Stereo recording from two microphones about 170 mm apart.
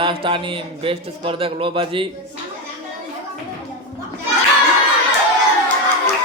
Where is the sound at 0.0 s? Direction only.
30° right (ahead or behind).